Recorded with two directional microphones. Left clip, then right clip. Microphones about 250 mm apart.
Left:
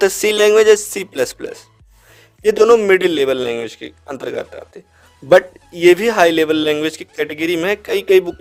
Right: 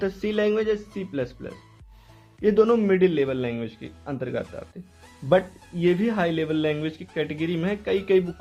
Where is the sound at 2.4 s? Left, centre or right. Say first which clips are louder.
Left 9 dB; left.